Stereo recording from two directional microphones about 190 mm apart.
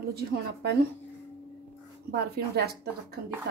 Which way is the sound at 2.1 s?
55° right (ahead or behind).